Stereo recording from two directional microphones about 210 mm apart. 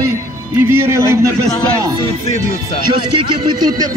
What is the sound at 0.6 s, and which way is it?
Speech, 10° right (ahead or behind).